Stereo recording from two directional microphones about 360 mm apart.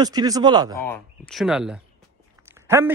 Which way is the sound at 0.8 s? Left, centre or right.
Centre.